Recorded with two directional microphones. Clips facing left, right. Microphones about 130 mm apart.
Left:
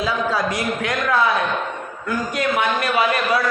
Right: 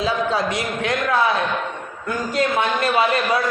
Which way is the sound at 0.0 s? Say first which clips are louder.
Even; 25° right (ahead or behind).